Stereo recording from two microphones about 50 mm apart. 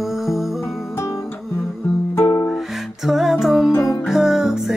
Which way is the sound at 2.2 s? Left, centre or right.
Left.